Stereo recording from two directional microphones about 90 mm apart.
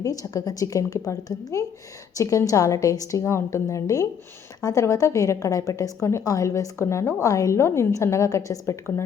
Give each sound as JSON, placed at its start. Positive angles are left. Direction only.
{"t": 0.0, "sound": "a woman's voice", "side_deg": 40}
{"t": 7.2, "sound": "a woman's voice", "side_deg": 40}